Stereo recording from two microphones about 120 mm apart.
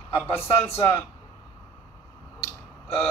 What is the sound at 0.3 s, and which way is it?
Speech, 55° left (ahead or behind).